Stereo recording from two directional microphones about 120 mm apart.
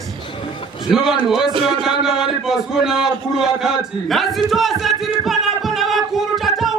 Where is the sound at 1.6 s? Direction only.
5° right (ahead or behind).